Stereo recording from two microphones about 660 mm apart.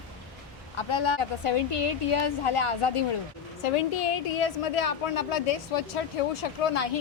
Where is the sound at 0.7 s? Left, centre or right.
Left.